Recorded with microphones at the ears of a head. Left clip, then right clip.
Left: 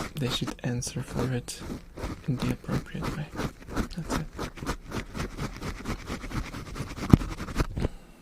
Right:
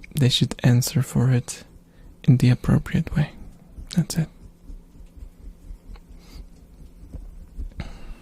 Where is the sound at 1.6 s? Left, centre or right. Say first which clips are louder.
Left 16 dB; left.